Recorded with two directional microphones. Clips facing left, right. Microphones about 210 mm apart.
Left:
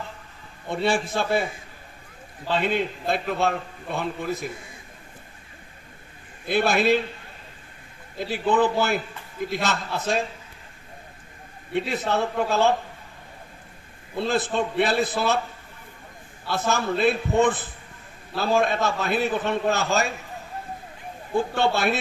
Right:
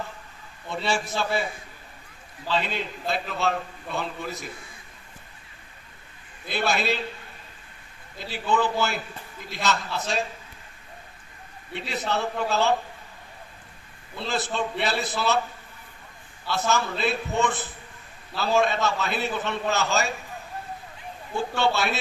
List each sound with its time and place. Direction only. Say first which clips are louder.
0.7 s a man's voice: left 4 dB; 55° left (ahead or behind)
2.4 s a man's voice: left 4 dB; 50° left (ahead or behind)
6.4 s a man's voice: left 5 dB; 50° left (ahead or behind)
8.2 s a man's voice: left 4 dB; 55° left (ahead or behind)
11.7 s a man's voice: left 4 dB; 55° left (ahead or behind)
14.1 s a man's voice: left 5 dB; 50° left (ahead or behind)
16.4 s a man's voice: left 1 dB; 55° left (ahead or behind)
21.4 s a man's voice: left 2 dB; 50° left (ahead or behind)